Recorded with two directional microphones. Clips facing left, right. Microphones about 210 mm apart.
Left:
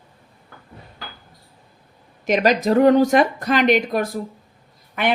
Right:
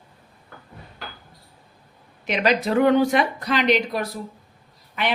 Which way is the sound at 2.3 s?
45° left (ahead or behind).